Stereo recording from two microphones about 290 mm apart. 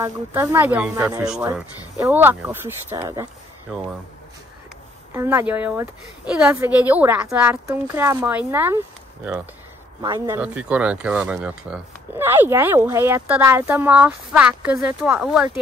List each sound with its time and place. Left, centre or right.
0.0 s speech: centre
5.1 s speech: centre